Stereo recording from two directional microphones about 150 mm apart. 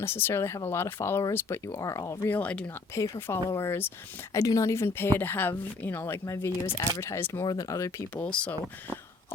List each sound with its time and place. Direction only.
0.0 s a woman's voice: 15° left (ahead or behind)
8.2 s a woman's voice: 5° left (ahead or behind)